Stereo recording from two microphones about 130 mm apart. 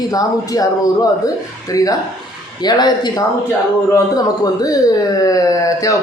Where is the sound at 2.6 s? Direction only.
35° left (ahead or behind).